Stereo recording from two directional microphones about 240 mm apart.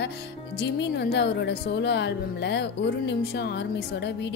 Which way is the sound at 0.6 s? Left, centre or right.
Left.